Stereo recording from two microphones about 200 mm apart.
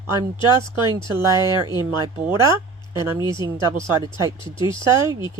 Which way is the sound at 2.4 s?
20° left (ahead or behind).